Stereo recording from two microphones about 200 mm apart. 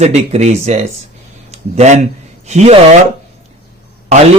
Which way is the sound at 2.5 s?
35° right (ahead or behind).